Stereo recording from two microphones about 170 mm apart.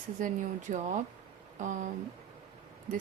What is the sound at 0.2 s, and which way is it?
Speech, 50° right (ahead or behind).